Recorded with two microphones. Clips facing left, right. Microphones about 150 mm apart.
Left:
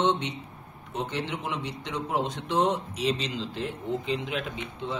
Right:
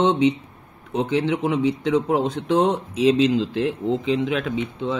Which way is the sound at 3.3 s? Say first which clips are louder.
Right 11 dB; 65° right (ahead or behind).